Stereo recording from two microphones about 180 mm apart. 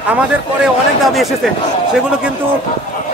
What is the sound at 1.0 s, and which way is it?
Speech, centre (ahead or behind).